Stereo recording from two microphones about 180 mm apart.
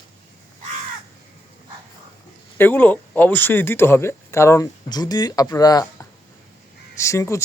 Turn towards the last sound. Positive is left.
turn(degrees=15)  # may be behind; listen again after turning